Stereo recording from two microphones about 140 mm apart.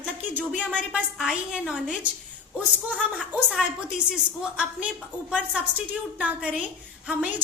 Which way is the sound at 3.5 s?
5° right (ahead or behind).